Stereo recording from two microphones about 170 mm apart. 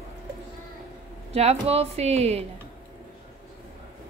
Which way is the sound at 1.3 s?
35° right (ahead or behind).